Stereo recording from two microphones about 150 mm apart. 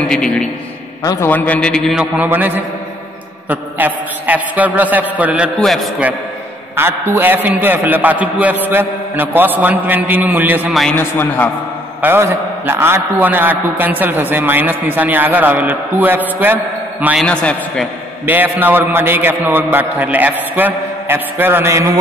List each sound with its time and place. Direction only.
0.1 s a man's voice: 5° left (ahead or behind)
1.0 s a man's voice: 20° left (ahead or behind)
1.3 s a man's voice: 10° left (ahead or behind)
2.0 s a man's voice: 10° right (ahead or behind)
6.8 s a man's voice: 15° right (ahead or behind)
10.7 s a man's voice: centre (ahead or behind)
11.0 s a man's voice: 15° left (ahead or behind)
12.0 s a man's voice: 15° right (ahead or behind)
17.3 s a man's voice: 5° left (ahead or behind)
18.2 s a man's voice: 15° right (ahead or behind)